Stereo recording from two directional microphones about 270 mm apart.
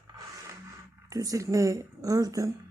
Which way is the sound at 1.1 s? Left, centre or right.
Centre.